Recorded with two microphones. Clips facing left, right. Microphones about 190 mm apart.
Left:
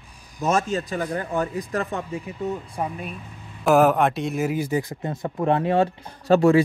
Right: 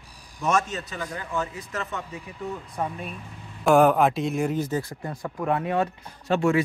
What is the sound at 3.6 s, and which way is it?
A man's voice, centre (ahead or behind).